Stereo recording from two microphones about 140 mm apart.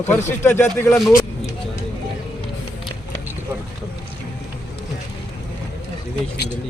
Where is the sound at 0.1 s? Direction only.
15° left (ahead or behind).